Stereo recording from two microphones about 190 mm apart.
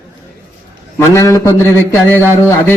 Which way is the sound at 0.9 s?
15° left (ahead or behind).